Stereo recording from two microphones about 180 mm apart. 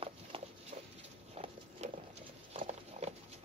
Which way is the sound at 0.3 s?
30° right (ahead or behind).